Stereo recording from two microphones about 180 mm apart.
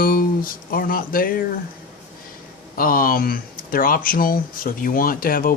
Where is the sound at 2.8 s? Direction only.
50° left (ahead or behind).